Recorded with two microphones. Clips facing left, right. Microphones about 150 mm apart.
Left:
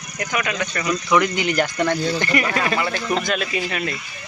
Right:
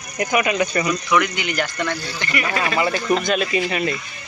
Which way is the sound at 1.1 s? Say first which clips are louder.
Left 3 dB; 35° left (ahead or behind).